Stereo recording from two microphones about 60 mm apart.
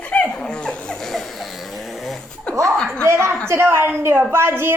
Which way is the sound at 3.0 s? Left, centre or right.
Right.